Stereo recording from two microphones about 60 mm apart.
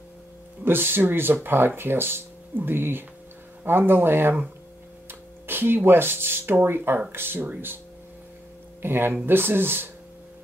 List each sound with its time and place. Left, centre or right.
0.7 s speech: right
5.5 s speech: right
8.8 s speech: right